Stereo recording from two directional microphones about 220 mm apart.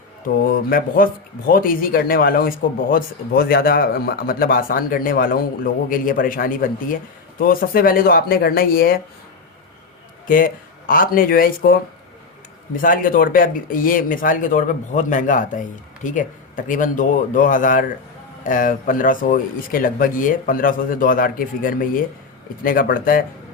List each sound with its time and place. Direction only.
0.7 s speech: 40° left (ahead or behind)
10.2 s speech: 40° left (ahead or behind)